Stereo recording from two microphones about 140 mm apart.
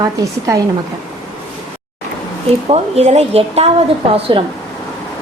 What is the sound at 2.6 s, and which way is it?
A woman's voice, 45° right (ahead or behind).